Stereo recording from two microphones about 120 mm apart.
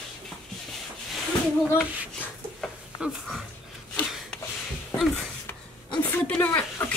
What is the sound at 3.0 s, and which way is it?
Speech, 5° right (ahead or behind).